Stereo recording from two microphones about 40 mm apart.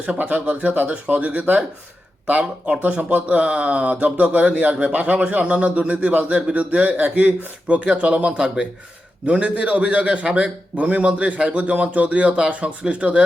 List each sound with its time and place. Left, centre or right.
0.0 s speech: right